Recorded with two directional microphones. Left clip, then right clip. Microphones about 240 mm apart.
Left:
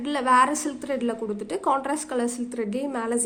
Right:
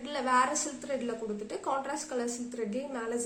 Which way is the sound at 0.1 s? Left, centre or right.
Left.